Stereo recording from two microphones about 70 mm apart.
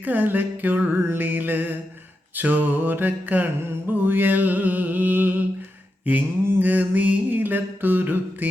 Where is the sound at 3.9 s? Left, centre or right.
Right.